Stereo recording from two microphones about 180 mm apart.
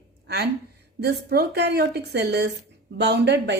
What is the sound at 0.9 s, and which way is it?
Speech, 65° right (ahead or behind).